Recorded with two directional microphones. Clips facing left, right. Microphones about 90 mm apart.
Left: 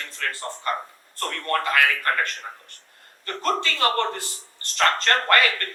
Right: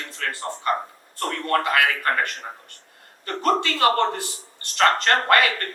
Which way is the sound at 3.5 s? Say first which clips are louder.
Right 4 dB; 20° right (ahead or behind).